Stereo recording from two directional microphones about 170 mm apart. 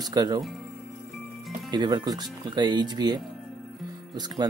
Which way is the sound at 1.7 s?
25° right (ahead or behind).